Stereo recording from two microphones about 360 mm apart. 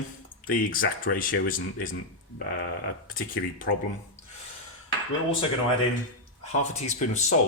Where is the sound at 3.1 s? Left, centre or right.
Left.